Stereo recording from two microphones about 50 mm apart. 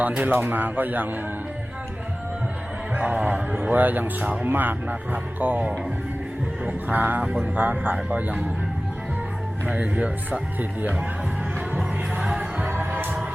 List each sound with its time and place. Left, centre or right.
0.2 s speech: right
2.9 s speech: right
3.7 s speech: right
6.7 s speech: right
9.6 s speech: right
12.4 s music: right